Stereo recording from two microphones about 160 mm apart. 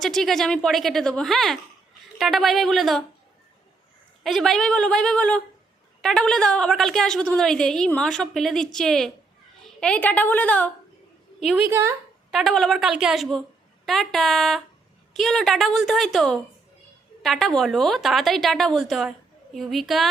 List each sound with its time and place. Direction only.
0.0 s a woman's voice: centre (ahead or behind)
4.2 s a woman's voice: centre (ahead or behind)
11.7 s speech: 15° right (ahead or behind)
12.3 s a woman's voice: centre (ahead or behind)